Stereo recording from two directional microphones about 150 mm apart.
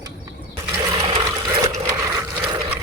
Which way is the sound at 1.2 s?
25° right (ahead or behind).